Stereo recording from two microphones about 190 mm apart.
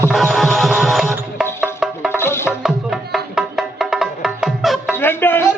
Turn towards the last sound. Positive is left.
turn(degrees=10)  # may be behind; listen again after turning